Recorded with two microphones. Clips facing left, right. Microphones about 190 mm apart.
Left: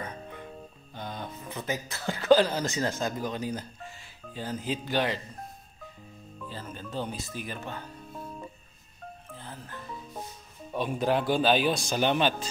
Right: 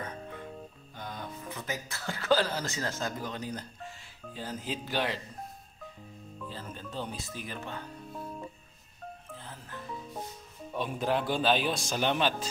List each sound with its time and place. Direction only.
0.0 s music: 15° left (ahead or behind)
0.9 s speech: 25° left (ahead or behind); by 5.2 s centre (ahead or behind)
6.4 s speech: centre (ahead or behind)
9.3 s music: centre (ahead or behind)
10.8 s speech: centre (ahead or behind)